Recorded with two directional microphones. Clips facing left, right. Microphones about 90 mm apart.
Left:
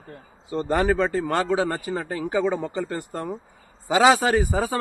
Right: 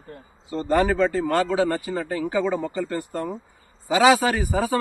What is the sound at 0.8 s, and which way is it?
A man's voice, 20° left (ahead or behind).